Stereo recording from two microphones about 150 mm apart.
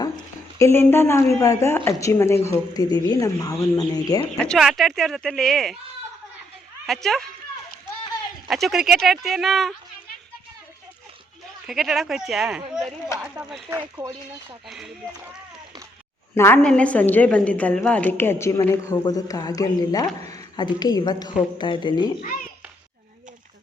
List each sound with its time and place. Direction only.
0.6 s a woman's voice: 15° left (ahead or behind)
4.4 s speech: 5° left (ahead or behind)
6.8 s speech: centre (ahead or behind)
8.4 s speech: centre (ahead or behind)
11.6 s speech: centre (ahead or behind)
16.3 s a woman's voice: 15° left (ahead or behind)